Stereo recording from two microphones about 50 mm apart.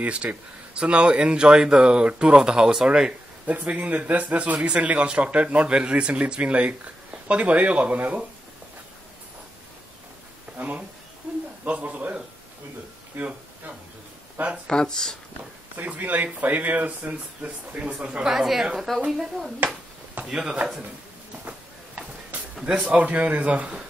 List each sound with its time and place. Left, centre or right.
0.0 s speech: right
10.6 s a man's voice: right
13.1 s a sound: right
14.7 s speech: centre
15.8 s speech: right
18.2 s a woman's voice: centre
18.9 s speech: centre
20.2 s a woman's voice: centre
22.6 s a woman's voice: centre
22.9 s speech: right